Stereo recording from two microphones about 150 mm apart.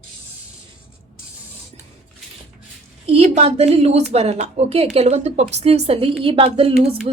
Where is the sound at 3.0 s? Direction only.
45° right (ahead or behind).